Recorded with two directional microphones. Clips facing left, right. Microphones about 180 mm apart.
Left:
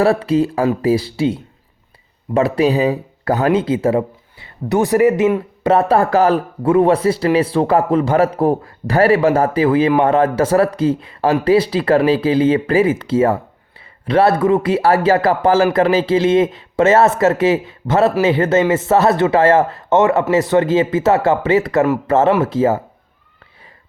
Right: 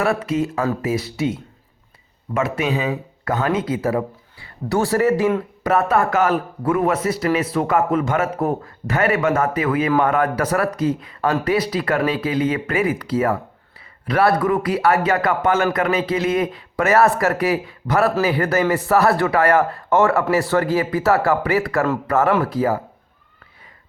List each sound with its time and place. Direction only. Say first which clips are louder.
0.0 s speech: left 6 dB; 30° left (ahead or behind)